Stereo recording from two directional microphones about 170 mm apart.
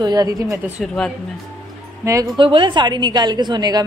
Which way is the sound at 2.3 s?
30° right (ahead or behind).